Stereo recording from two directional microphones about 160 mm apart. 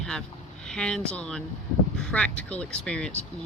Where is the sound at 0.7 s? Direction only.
5° left (ahead or behind).